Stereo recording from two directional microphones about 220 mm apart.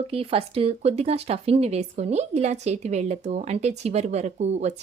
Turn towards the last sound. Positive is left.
turn(degrees=-30)  # may be behind; listen again after turning